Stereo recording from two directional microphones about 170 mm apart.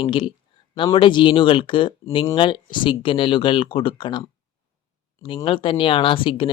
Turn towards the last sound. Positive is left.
turn(degrees=30)  # may be behind; listen again after turning